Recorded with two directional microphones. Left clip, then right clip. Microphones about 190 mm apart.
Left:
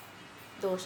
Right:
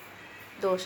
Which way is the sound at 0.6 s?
Centre (ahead or behind).